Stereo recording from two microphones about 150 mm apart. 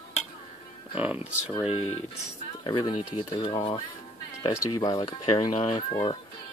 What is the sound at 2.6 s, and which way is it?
Speech, 30° left (ahead or behind).